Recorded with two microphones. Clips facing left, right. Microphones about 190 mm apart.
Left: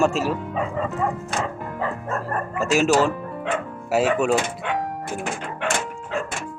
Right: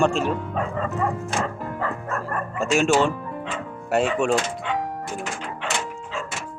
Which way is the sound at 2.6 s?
5° left (ahead or behind).